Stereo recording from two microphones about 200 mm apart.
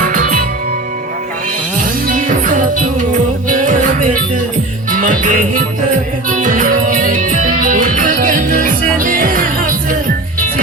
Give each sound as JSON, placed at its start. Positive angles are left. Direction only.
{"t": 0.0, "sound": "music", "side_deg": -40}
{"t": 1.8, "sound": "music", "side_deg": -40}